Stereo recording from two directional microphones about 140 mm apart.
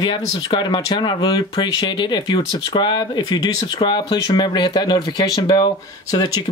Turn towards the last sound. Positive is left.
turn(degrees=30)  # may be behind; listen again after turning